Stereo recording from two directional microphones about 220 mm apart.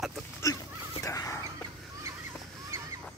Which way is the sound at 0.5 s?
15° left (ahead or behind).